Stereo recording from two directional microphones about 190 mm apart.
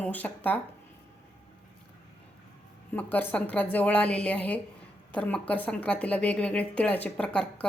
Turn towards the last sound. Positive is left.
turn(degrees=5)  # may be behind; listen again after turning